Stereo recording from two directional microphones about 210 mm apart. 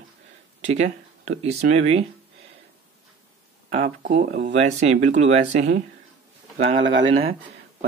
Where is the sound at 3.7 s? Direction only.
35° right (ahead or behind).